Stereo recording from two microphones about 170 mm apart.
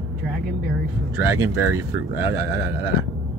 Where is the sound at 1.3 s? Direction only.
20° right (ahead or behind).